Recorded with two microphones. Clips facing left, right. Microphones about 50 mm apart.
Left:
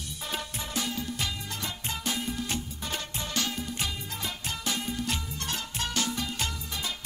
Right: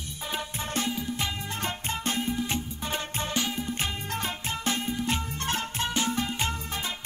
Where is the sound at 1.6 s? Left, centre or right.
Right.